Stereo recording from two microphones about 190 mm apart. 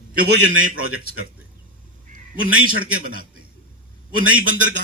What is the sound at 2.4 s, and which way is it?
Speech, 90° right.